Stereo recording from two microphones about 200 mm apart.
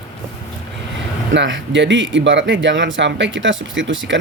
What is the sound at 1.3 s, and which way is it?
Speech, 65° right (ahead or behind).